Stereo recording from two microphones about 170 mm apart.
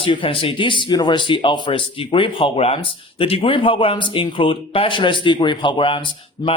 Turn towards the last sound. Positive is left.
turn(degrees=30)  # may be behind; listen again after turning